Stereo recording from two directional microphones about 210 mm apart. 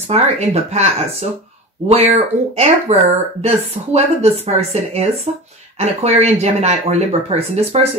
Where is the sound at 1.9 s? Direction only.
30° right (ahead or behind).